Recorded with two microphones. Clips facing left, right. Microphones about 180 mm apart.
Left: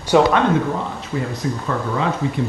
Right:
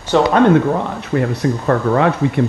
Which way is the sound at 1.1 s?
65° right (ahead or behind).